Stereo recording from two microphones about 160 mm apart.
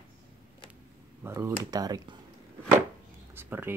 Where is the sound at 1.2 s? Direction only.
15° right (ahead or behind).